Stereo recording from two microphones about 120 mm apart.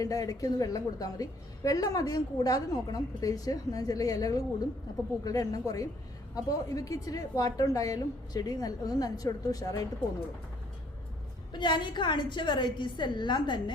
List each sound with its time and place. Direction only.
0.0 s a woman's voice: 30° left (ahead or behind)
11.5 s a woman's voice: 40° left (ahead or behind)